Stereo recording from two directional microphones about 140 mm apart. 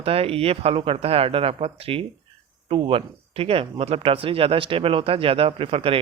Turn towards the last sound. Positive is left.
turn(degrees=-40)  # may be behind; listen again after turning